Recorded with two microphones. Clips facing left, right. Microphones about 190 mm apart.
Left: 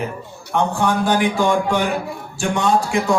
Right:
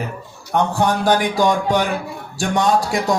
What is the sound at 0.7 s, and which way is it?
A man's voice, 40° right (ahead or behind).